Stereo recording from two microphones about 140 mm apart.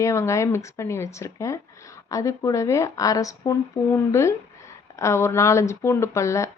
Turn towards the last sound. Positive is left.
turn(degrees=20)  # may be behind; listen again after turning